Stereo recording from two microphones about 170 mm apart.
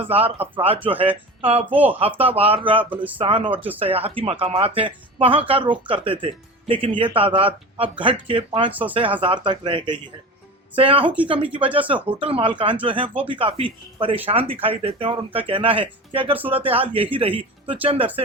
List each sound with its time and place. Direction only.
0.0 s speech: 35° right (ahead or behind)
1.7 s speech: 10° right (ahead or behind)
2.0 s speech: 35° right (ahead or behind)